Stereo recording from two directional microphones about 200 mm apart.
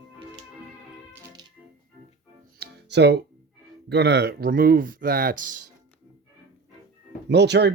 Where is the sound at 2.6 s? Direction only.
55° right (ahead or behind).